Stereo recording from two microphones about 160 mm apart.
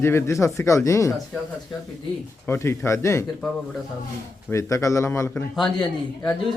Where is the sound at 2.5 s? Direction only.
15° left (ahead or behind).